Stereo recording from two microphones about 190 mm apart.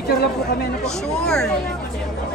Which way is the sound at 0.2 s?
55° left (ahead or behind).